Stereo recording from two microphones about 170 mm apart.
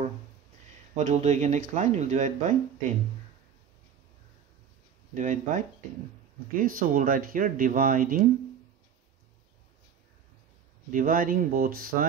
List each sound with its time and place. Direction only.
0.9 s speech: 45° right (ahead or behind)
5.1 s speech: 45° right (ahead or behind)
10.9 s speech: 55° right (ahead or behind)